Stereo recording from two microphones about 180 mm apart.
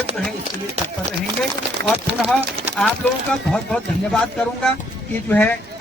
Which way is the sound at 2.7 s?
10° left (ahead or behind).